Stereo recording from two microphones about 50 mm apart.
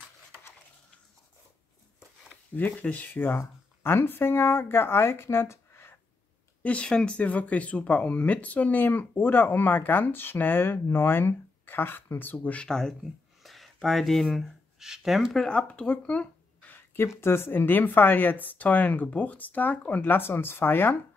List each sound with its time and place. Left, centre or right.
2.5 s speech: left
3.3 s speech: left
6.6 s speech: left
12.6 s speech: centre
13.4 s a sound: centre
14.8 s speech: centre
15.3 s speech: centre
16.7 s a sound: left
17.2 s speech: left